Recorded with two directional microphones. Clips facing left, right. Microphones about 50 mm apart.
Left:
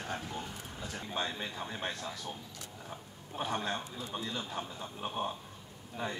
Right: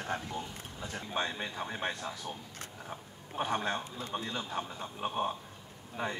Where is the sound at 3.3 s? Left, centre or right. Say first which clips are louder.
Right 2 dB; right.